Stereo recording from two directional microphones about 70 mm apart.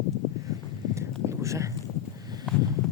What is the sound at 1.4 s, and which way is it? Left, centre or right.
Speech, right.